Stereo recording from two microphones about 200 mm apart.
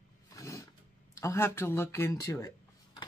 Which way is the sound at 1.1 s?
15° left (ahead or behind).